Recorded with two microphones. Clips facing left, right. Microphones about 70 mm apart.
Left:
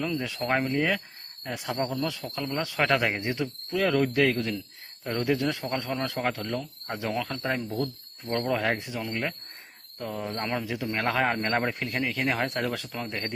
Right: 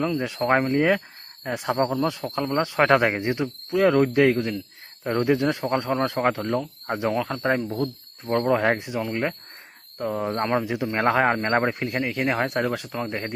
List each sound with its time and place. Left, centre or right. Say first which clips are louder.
0.0 s speech: right 6 dB; right
2.2 s speech: right 7 dB; right
3.2 s speech: right 5 dB; right
7.3 s speech: right 6 dB; right
7.8 s speech: right 3 dB; right